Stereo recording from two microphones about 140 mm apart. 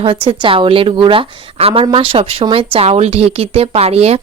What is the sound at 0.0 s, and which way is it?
A woman's voice, 40° right (ahead or behind).